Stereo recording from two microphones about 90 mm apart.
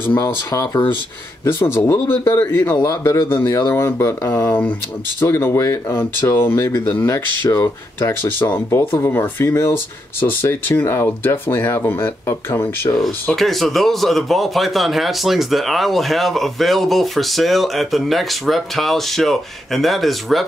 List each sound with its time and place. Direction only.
0.2 s speech: 35° left (ahead or behind)
12.9 s speech: 5° left (ahead or behind)